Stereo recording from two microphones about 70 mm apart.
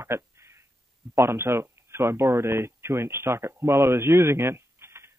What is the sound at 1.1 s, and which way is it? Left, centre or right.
Speech, right.